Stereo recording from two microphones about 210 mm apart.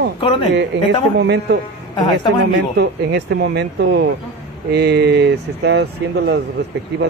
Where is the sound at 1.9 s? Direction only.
20° left (ahead or behind).